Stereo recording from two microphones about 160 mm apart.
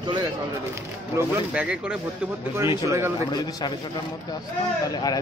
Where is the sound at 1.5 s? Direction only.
5° right (ahead or behind).